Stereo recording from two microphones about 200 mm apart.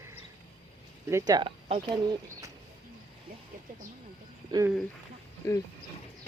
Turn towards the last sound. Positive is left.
turn(degrees=15)  # may be behind; listen again after turning